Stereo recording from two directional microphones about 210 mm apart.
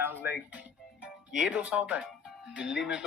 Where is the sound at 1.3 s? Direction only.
5° right (ahead or behind).